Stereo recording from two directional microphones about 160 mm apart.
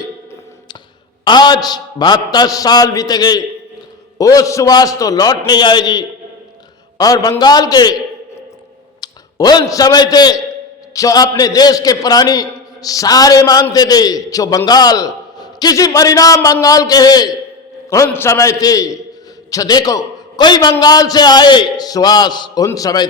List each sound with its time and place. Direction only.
1.2 s a man's voice: 25° left (ahead or behind)
9.0 s a man's voice: 25° left (ahead or behind)